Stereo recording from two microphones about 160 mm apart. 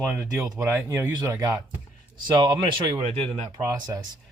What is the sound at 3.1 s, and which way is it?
Speech, 40° right (ahead or behind).